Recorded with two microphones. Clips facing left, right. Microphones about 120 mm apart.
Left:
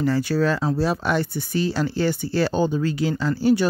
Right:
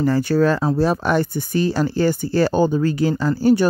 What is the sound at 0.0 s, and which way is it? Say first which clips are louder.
Speech: right 4 dB; 45° right (ahead or behind).